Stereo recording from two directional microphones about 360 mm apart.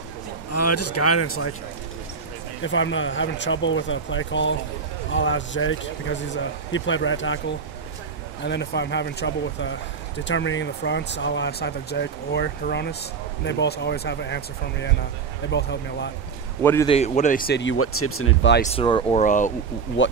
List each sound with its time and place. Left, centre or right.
0.5 s speech: left
2.6 s speech: left
8.5 s speech: left
16.6 s speech: centre; by 18.6 s left
18.7 s speech: centre; by 20.1 s left